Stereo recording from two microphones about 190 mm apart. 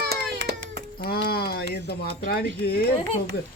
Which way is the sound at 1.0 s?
55° left (ahead or behind).